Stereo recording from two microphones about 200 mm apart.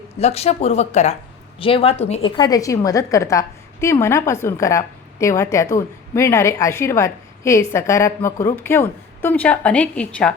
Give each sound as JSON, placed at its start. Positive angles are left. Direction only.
{"t": 0.2, "sound": "a woman's voice", "side_deg": 30}